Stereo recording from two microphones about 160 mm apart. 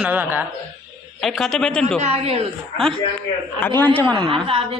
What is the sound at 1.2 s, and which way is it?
Speech, centre (ahead or behind).